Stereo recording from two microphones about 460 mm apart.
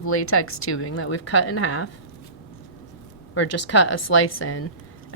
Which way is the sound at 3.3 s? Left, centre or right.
Left.